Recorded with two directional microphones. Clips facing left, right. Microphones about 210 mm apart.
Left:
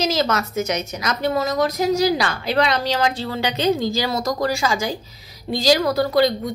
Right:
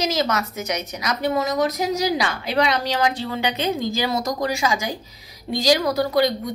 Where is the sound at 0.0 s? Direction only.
15° right (ahead or behind).